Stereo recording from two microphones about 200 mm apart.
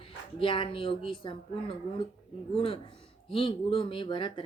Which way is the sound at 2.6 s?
25° left (ahead or behind).